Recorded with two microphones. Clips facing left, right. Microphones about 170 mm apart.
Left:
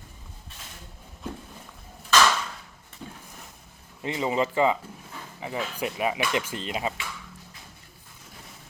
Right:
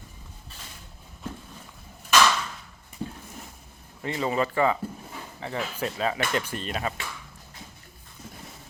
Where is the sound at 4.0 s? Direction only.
20° left (ahead or behind).